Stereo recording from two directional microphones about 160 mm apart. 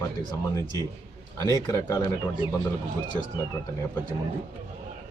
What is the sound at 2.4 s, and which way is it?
Speech, 30° left (ahead or behind).